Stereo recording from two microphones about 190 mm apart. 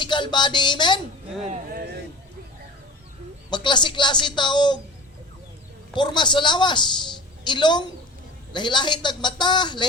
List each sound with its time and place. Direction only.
0.0 s speech: 25° left (ahead or behind)
1.4 s a sound: 35° right (ahead or behind)
3.5 s a woman's voice: 25° left (ahead or behind)
5.9 s a woman's voice: 25° left (ahead or behind)